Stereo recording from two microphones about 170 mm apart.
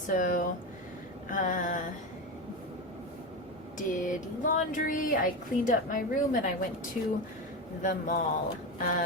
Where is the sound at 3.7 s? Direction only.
50° left (ahead or behind).